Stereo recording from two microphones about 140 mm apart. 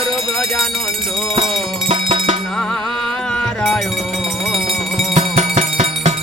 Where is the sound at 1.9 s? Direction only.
40° right (ahead or behind).